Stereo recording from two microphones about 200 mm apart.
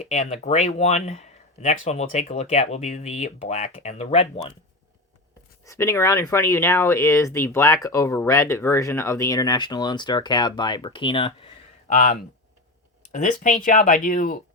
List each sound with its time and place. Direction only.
0.1 s speech: 35° left (ahead or behind)
5.6 s speech: 15° left (ahead or behind)
11.9 s speech: 40° left (ahead or behind)